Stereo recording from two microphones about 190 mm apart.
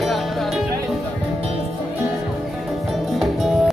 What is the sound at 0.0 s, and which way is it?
Music, centre (ahead or behind).